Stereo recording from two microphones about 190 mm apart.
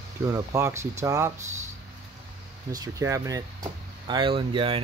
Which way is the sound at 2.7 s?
20° right (ahead or behind).